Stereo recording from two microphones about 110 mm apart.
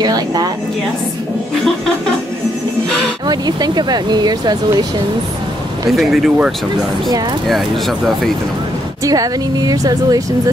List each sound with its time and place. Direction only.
0.0 s a sound: 35° right (ahead or behind)
3.3 s speech: 40° right (ahead or behind)
5.9 s speech: centre (ahead or behind)
9.0 s speech: 35° right (ahead or behind)